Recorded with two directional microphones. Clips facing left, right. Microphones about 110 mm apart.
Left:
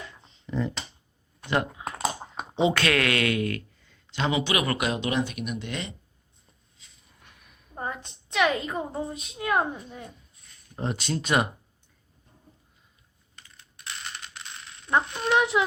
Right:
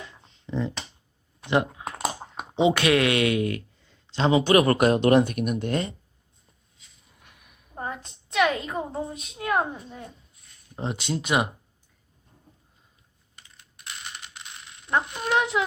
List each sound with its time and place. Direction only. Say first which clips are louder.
0.1 s a sound: right 3 dB; 20° right (ahead or behind)
1.8 s typing: even; 5° right (ahead or behind)
2.6 s speech: right 3 dB; 20° right (ahead or behind); by 5.9 s 45° right (ahead or behind)
7.2 s a sound: even; 15° right (ahead or behind)
7.8 s a woman's voice: even; centre (ahead or behind)
10.8 s speech: even; 20° right (ahead or behind)
13.7 s coin: left 1 dB; 10° right (ahead or behind)
15.0 s a woman's voice: left 1 dB; 5° right (ahead or behind)